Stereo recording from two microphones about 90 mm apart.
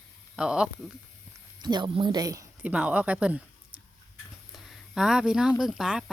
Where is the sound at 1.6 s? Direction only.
55° right (ahead or behind).